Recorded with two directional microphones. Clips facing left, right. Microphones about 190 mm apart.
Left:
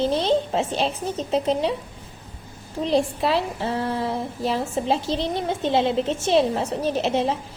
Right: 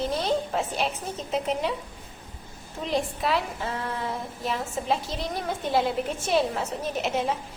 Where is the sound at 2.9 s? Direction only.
30° left (ahead or behind).